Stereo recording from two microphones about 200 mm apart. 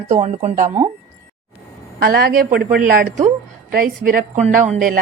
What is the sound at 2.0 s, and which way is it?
A woman's voice, 50° right (ahead or behind).